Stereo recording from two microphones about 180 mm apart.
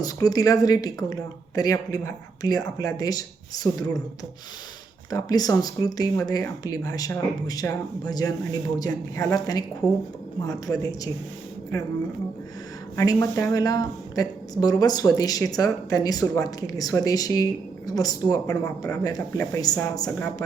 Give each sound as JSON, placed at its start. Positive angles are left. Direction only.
{"t": 0.0, "sound": "speech", "side_deg": 20}
{"t": 5.1, "sound": "speech", "side_deg": 20}
{"t": 13.0, "sound": "speech", "side_deg": 15}